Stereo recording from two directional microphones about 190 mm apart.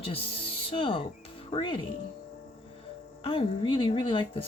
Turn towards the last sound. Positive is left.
turn(degrees=25)  # may be behind; listen again after turning